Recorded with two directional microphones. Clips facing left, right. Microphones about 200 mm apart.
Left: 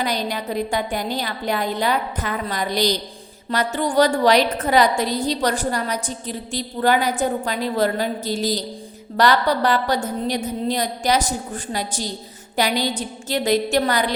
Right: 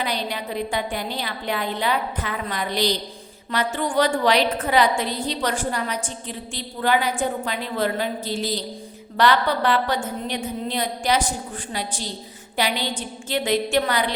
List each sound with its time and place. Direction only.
0.0 s a woman's voice: 40° left (ahead or behind)